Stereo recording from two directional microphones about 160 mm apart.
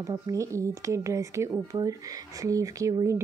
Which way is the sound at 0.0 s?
20° right (ahead or behind).